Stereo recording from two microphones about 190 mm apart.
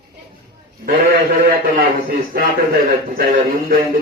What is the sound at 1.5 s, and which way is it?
A man's voice, 50° right (ahead or behind).